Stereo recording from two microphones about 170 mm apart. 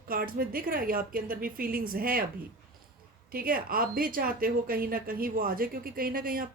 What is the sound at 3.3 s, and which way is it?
A woman's voice, 60° right (ahead or behind).